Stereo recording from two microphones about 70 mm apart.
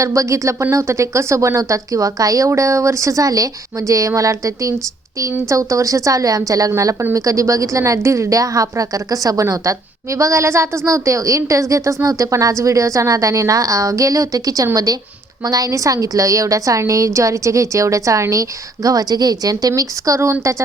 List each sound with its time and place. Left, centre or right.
0.0 s a woman's voice: right